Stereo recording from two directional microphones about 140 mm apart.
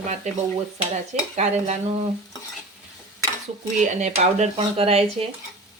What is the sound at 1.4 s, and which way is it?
Speech, 55° right (ahead or behind).